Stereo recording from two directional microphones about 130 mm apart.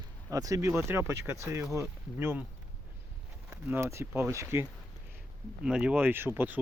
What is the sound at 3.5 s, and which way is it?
Speech, 15° right (ahead or behind).